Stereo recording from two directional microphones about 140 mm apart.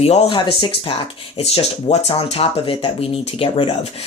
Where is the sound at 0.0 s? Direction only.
45° left (ahead or behind).